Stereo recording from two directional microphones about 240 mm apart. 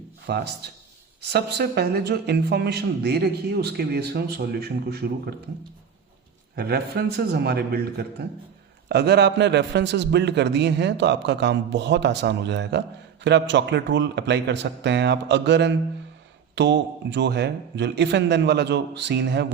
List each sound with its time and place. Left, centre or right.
0.3 s speech: right
6.6 s a man's voice: right